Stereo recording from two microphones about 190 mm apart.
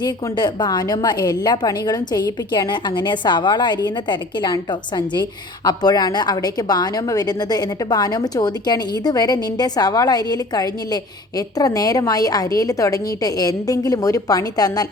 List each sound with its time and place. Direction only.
0.0 s a woman's voice: 20° left (ahead or behind)